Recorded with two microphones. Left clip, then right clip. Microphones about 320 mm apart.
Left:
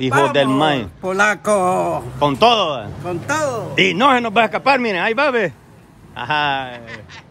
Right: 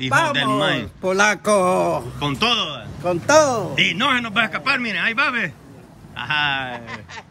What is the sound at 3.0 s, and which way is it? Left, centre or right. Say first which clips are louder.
Speech: right 7 dB; centre.